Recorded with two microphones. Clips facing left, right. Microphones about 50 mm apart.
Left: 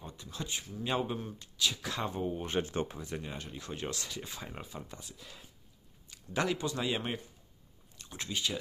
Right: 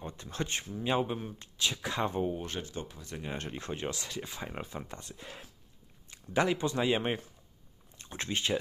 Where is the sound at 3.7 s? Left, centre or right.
Centre.